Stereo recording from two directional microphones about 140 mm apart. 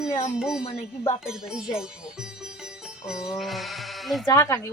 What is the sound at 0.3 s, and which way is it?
Speech, 5° right (ahead or behind).